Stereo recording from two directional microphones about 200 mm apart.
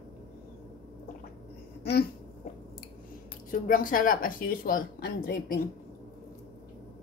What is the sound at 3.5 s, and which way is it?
Speech, 40° left (ahead or behind).